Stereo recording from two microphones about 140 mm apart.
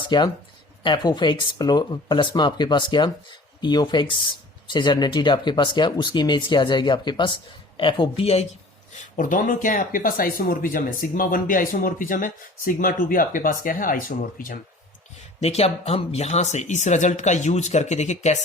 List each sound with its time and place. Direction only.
0.1 s speech: 30° left (ahead or behind)
8.9 s speech: 70° left (ahead or behind)
15.4 s speech: 50° left (ahead or behind)